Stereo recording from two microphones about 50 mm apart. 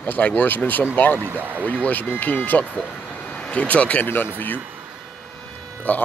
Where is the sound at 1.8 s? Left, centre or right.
Left.